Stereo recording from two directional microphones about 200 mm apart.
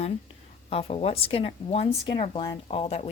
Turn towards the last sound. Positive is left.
turn(degrees=30)  # may be behind; listen again after turning